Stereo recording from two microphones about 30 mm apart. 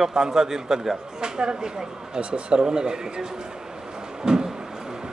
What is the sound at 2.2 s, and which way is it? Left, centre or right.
A man's voice, right.